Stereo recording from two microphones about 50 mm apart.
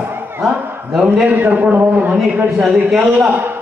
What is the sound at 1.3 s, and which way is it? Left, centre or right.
Speech, right.